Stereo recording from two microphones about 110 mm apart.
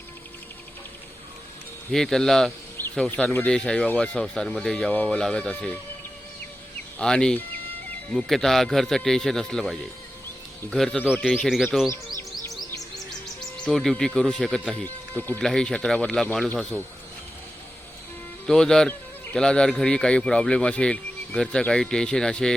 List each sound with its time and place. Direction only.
1.9 s speech: 5° left (ahead or behind)
2.8 s a sound: 20° left (ahead or behind)
3.4 s speech: 5° left (ahead or behind)
7.0 s speech: 5° left (ahead or behind)
13.7 s speech: 5° left (ahead or behind)
14.8 s speech: 15° left (ahead or behind)
15.4 s speech: 5° left (ahead or behind)
18.4 s speech: 5° left (ahead or behind)